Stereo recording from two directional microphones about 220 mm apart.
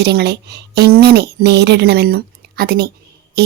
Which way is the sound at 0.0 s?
50° right (ahead or behind).